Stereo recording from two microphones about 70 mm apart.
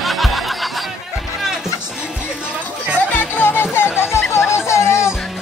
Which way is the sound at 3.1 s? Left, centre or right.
Left.